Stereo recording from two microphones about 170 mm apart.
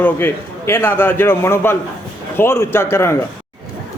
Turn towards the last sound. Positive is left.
turn(degrees=15)  # may be behind; listen again after turning